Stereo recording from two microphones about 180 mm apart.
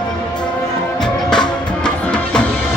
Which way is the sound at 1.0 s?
5° left (ahead or behind).